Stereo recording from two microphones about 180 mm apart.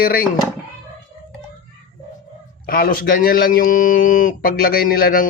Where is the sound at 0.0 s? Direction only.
55° left (ahead or behind).